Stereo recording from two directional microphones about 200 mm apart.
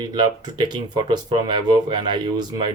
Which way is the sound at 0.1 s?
20° right (ahead or behind).